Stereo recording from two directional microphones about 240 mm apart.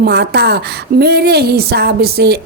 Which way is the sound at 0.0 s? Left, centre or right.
Right.